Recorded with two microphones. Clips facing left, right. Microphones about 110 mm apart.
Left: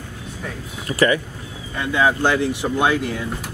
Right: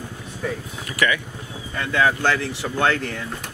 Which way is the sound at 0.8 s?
35° left (ahead or behind).